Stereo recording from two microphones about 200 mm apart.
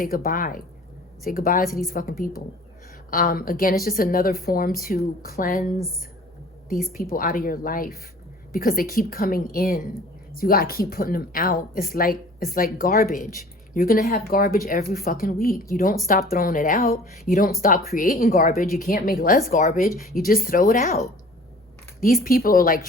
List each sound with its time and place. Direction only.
0.0 s a woman's voice: 45° left (ahead or behind)
6.9 s a woman's voice: 45° left (ahead or behind)
22.0 s a woman's voice: 45° left (ahead or behind)